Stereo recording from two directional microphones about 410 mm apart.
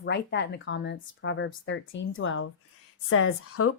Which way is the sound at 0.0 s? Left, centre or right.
Left.